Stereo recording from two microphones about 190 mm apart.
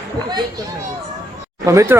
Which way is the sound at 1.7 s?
15° right (ahead or behind).